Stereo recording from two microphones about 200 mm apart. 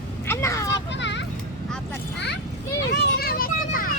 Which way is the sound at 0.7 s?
60° left (ahead or behind).